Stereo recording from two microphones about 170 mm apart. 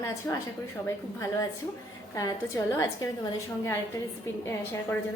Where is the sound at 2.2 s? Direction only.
20° left (ahead or behind).